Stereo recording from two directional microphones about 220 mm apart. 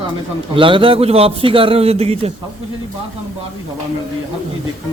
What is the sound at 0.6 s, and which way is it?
Speech, 25° right (ahead or behind).